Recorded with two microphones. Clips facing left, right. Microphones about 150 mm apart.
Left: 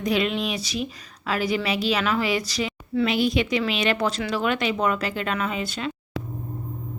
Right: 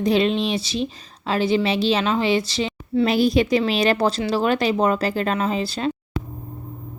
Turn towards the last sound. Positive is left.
turn(degrees=-35)  # may be behind; listen again after turning